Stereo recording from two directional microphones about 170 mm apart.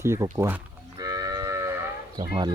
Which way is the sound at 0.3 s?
15° right (ahead or behind).